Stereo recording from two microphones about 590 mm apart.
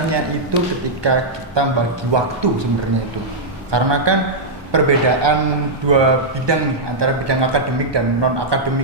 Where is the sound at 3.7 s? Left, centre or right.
Right.